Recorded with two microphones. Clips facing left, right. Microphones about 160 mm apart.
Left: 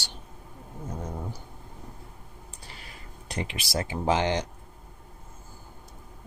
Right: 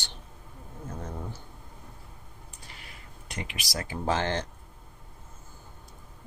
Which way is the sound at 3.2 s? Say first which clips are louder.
Left 5 dB; 30° left (ahead or behind).